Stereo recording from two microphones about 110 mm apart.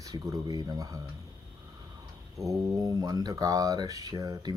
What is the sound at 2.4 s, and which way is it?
Speech, 30° right (ahead or behind).